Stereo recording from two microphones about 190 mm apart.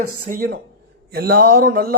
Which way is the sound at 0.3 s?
55° right (ahead or behind).